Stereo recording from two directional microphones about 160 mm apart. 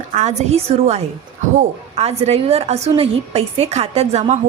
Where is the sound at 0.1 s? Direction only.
45° right (ahead or behind).